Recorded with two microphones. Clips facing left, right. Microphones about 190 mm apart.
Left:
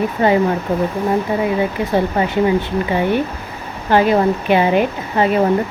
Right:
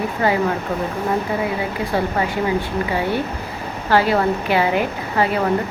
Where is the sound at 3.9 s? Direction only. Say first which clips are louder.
Left 3 dB; 20° left (ahead or behind).